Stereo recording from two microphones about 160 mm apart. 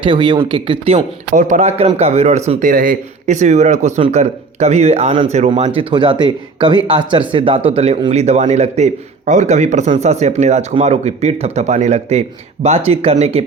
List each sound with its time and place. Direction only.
0.0 s speech: 30° right (ahead or behind)
1.3 s speech: 50° right (ahead or behind)
2.6 s speech: 60° right (ahead or behind); by 5.8 s 45° right (ahead or behind)
5.9 s speech: 30° right (ahead or behind)